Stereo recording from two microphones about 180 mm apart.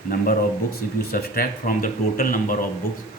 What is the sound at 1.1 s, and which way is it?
Speech, 55° left (ahead or behind).